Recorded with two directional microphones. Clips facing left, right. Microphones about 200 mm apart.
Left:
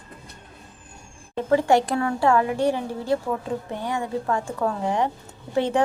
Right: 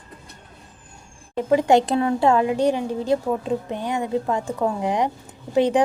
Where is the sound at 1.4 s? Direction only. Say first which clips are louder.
Right 2 dB; 15° right (ahead or behind).